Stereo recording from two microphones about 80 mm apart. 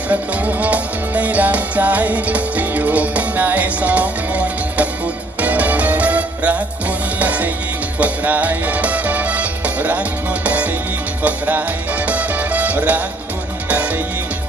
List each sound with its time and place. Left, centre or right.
0.1 s music: centre